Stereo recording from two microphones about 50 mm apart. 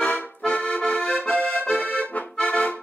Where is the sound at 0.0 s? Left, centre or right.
Left.